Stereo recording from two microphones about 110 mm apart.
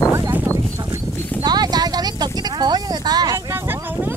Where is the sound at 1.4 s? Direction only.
40° right (ahead or behind).